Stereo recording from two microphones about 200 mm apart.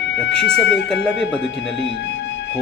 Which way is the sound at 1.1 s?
65° left (ahead or behind).